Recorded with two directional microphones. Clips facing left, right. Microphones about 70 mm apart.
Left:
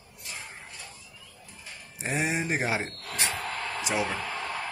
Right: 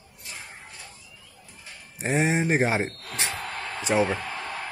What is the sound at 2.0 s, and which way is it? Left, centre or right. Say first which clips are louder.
Speech: right 5 dB; right.